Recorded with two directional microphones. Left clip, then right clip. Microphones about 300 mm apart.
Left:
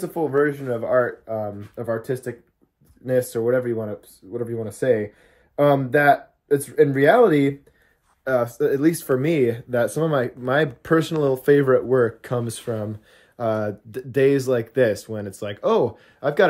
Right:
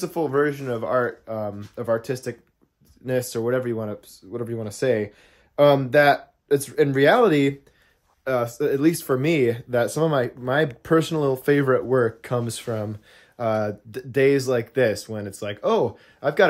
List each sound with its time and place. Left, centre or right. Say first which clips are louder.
0.0 s speech: left 1 dB; centre